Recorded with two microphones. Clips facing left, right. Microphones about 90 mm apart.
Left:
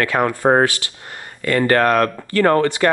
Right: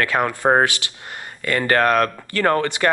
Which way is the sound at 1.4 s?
35° left (ahead or behind).